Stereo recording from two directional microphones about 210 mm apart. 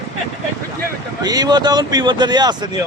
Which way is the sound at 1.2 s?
20° right (ahead or behind).